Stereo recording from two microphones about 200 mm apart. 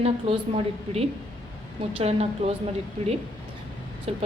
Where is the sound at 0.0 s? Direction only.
30° right (ahead or behind).